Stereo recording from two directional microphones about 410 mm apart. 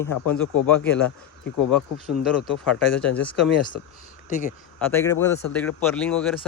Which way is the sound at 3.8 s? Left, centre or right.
Left.